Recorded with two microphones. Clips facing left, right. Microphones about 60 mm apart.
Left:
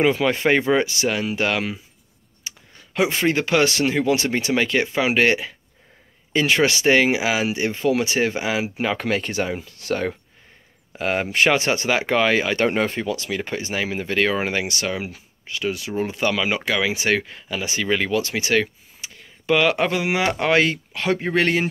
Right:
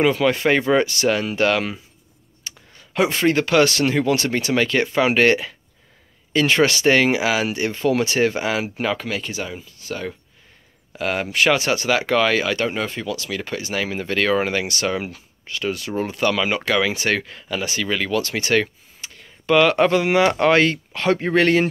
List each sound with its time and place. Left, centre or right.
0.0 s speech: centre
2.4 s a sound: centre
2.9 s speech: centre
8.9 s speech: left
9.7 s speech: left
11.0 s speech: left
12.5 s speech: left
13.7 s speech: centre
17.6 s speech: centre
18.3 s speech: centre